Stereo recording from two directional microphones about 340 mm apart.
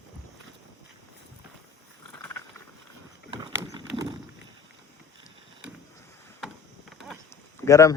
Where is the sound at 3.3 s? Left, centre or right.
Centre.